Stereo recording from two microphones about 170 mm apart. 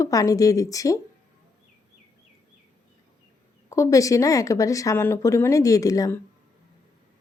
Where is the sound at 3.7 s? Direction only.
20° left (ahead or behind).